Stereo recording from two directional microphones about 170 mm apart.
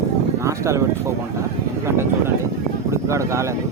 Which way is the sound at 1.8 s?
15° right (ahead or behind).